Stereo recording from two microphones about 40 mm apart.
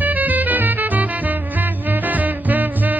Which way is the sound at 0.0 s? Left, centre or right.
Right.